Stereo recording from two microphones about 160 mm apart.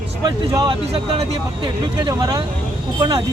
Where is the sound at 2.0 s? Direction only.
25° right (ahead or behind).